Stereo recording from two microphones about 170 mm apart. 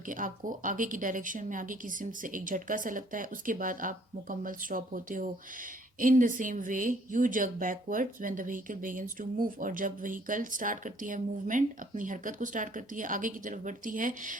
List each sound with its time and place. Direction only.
0.1 s speech: 50° right (ahead or behind)